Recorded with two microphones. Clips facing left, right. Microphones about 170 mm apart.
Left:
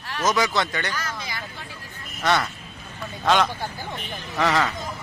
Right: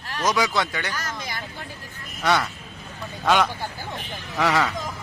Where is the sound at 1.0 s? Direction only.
50° right (ahead or behind).